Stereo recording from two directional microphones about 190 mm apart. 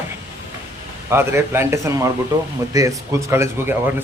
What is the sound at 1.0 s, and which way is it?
A man's voice, 15° right (ahead or behind).